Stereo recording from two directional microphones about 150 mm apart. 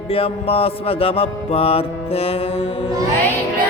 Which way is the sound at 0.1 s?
40° left (ahead or behind).